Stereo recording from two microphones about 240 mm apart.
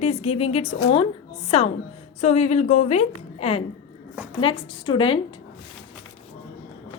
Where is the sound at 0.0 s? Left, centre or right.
Left.